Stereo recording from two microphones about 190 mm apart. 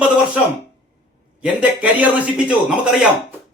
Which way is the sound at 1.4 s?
5° right (ahead or behind).